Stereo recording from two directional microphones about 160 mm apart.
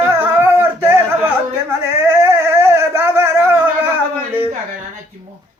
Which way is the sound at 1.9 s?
15° right (ahead or behind).